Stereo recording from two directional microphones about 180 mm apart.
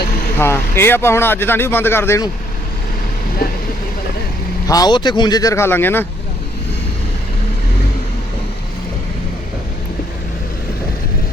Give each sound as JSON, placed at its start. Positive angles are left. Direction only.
{"t": 0.3, "sound": "speech", "side_deg": 15}
{"t": 4.7, "sound": "speech", "side_deg": 20}